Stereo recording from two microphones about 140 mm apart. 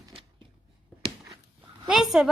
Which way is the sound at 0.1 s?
40° right (ahead or behind).